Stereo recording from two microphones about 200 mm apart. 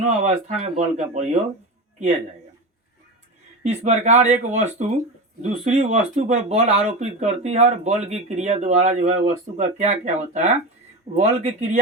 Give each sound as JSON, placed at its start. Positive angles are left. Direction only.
{"t": 0.0, "sound": "speech", "side_deg": -35}
{"t": 3.6, "sound": "speech", "side_deg": -35}